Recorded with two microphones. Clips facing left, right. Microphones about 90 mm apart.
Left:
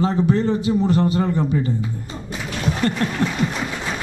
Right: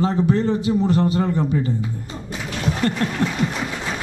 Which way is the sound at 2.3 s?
15° left (ahead or behind).